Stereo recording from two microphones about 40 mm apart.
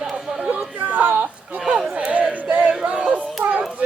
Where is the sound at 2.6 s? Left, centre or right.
Right.